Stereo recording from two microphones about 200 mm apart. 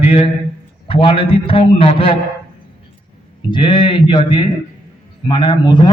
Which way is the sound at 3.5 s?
25° left (ahead or behind).